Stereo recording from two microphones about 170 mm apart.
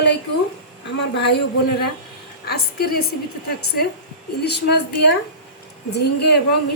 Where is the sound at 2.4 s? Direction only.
65° left (ahead or behind).